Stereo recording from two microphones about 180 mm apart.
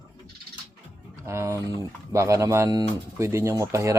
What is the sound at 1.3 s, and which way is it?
Speech, 15° right (ahead or behind).